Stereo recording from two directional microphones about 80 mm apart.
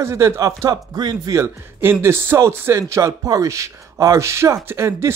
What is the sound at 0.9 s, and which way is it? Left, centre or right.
Speech, right.